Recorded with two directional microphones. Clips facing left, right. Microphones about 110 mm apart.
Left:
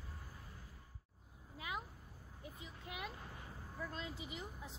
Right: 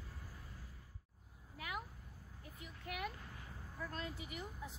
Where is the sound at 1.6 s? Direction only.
20° left (ahead or behind).